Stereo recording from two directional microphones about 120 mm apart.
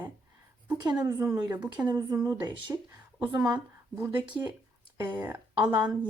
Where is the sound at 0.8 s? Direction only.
35° right (ahead or behind).